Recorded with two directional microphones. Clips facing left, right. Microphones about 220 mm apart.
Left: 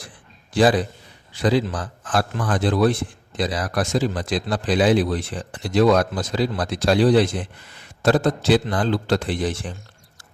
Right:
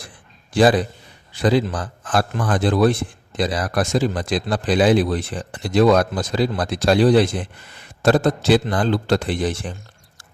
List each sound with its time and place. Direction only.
1.4 s a man's voice: 50° right (ahead or behind)